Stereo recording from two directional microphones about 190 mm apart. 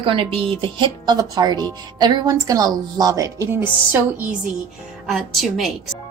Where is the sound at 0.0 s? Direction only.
25° right (ahead or behind); by 5.7 s centre (ahead or behind).